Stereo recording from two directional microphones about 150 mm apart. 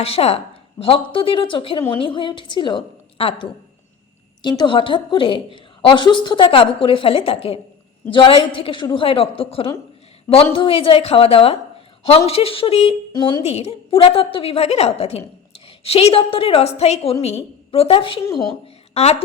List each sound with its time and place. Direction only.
0.0 s a woman's voice: 40° left (ahead or behind)
13.1 s a woman's voice: 30° left (ahead or behind)
13.4 s a woman's voice: 45° left (ahead or behind)
18.6 s a sound: 45° left (ahead or behind)